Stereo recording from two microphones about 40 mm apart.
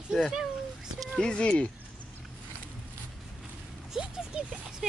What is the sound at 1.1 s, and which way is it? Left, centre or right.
Speech, left.